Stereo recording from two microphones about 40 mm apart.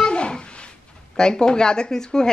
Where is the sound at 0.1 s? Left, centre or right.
Left.